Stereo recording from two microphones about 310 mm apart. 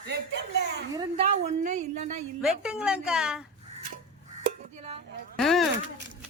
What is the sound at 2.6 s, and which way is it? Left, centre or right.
Speech, centre.